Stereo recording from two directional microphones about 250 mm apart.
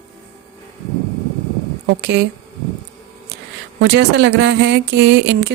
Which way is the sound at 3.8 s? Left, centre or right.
Right.